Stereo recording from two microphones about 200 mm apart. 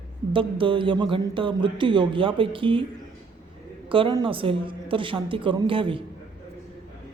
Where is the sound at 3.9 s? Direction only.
25° right (ahead or behind).